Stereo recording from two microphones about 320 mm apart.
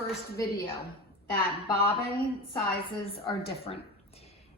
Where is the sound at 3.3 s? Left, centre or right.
Centre.